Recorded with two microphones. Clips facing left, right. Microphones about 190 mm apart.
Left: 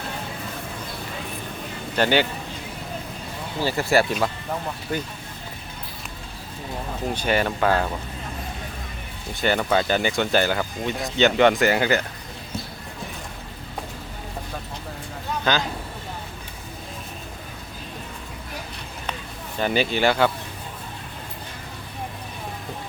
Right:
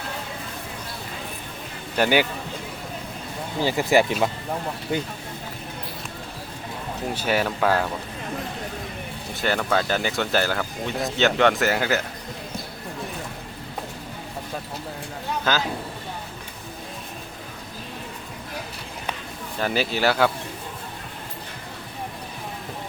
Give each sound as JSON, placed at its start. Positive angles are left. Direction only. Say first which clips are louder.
{"t": 2.0, "sound": "speech", "louder": "even", "side_deg": -10}
{"t": 3.6, "sound": "speech", "louder": "right 1 dB", "side_deg": -15}
{"t": 7.1, "sound": "speech", "louder": "left 1 dB", "side_deg": -5}
{"t": 9.3, "sound": "speech", "louder": "left 2 dB", "side_deg": 0}
{"t": 15.5, "sound": "speech", "louder": "left 1 dB", "side_deg": -5}
{"t": 19.5, "sound": "speech", "louder": "left 2 dB", "side_deg": 0}